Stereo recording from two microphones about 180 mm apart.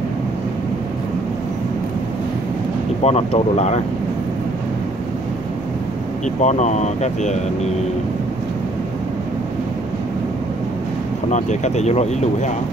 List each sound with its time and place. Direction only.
3.0 s speech: 35° left (ahead or behind)
6.4 s speech: 40° left (ahead or behind)
11.2 s speech: 40° left (ahead or behind)